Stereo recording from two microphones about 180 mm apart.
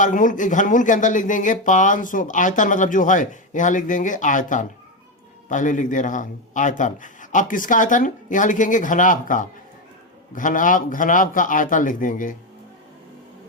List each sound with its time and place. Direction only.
0.0 s speech: 45° left (ahead or behind)